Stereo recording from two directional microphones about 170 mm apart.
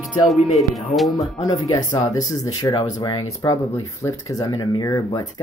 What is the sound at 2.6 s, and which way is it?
Speech, 20° left (ahead or behind).